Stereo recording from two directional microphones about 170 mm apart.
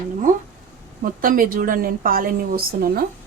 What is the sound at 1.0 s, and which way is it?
A woman's voice, 55° right (ahead or behind).